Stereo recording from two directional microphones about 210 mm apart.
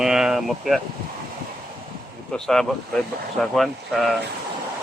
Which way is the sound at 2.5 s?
Centre (ahead or behind).